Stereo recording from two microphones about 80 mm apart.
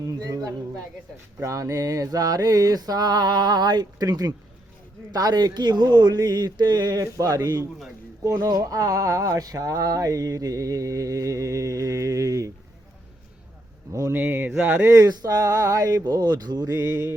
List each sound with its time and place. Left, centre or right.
0.0 s a man's voice: right
1.4 s speech: right
14.1 s mantra: right
14.8 s speech: right
16.0 s speech: right